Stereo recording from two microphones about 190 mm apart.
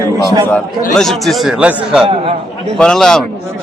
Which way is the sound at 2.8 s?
5° left (ahead or behind).